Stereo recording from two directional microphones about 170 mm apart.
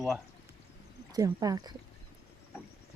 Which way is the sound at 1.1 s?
20° right (ahead or behind).